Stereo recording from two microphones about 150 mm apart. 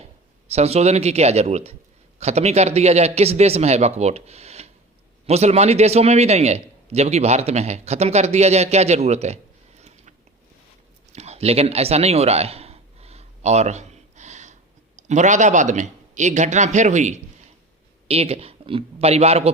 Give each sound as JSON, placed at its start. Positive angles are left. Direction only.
{"t": 0.4, "sound": "a man's voice", "side_deg": -45}
{"t": 11.1, "sound": "a sound", "side_deg": -45}
{"t": 14.9, "sound": "a man's voice", "side_deg": -50}
{"t": 18.1, "sound": "speech", "side_deg": -40}